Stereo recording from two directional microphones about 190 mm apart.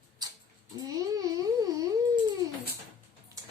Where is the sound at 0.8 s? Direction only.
20° right (ahead or behind).